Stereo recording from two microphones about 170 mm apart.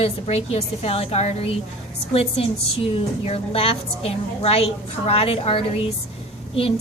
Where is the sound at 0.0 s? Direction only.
35° left (ahead or behind).